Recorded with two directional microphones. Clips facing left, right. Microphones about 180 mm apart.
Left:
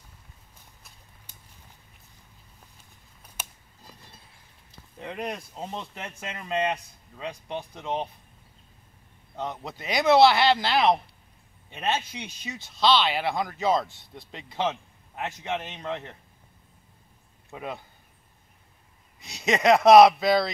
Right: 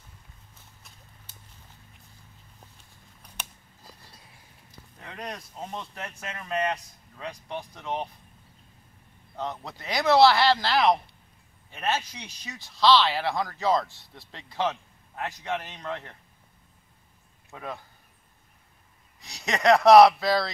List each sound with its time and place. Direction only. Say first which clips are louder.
4.9 s a sound: left 8 dB; 20° left (ahead or behind)
5.2 s speech: left 2 dB; 10° left (ahead or behind)
5.8 s speech: left 1 dB; 25° left (ahead or behind)
9.4 s speech: left 1 dB; 20° left (ahead or behind)
17.5 s speech: left 2 dB; 15° left (ahead or behind)
19.1 s speech: left 5 dB; 20° left (ahead or behind)